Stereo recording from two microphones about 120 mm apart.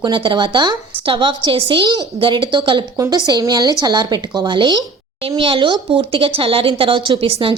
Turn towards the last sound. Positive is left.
turn(degrees=-50)  # may be behind; listen again after turning